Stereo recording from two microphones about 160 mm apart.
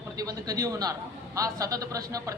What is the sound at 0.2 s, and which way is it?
A woman's voice, 20° right (ahead or behind).